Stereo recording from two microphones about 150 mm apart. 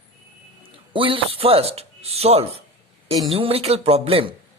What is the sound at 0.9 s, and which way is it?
Speech, 35° right (ahead or behind).